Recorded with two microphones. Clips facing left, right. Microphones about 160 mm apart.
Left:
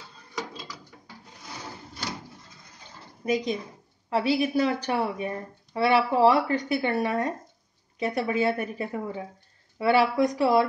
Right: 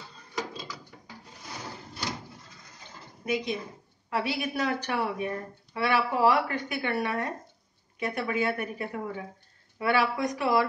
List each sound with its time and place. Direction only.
3.3 s a woman's voice: 35° left (ahead or behind)